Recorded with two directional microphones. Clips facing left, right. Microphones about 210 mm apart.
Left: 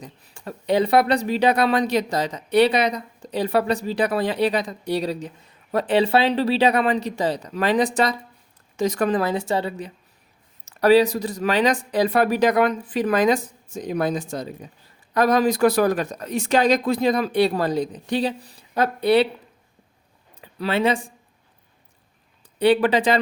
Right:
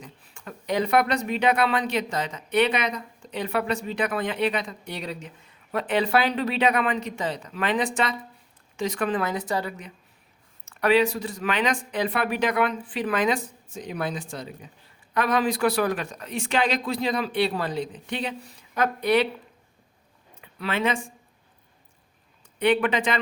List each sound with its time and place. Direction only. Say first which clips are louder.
0.0 s speech: left 5 dB; 35° left (ahead or behind)
20.4 s speech: left 5 dB; 35° left (ahead or behind)
22.5 s speech: left 5 dB; 35° left (ahead or behind)